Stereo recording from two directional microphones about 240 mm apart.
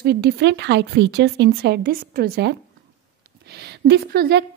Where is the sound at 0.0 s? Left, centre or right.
Right.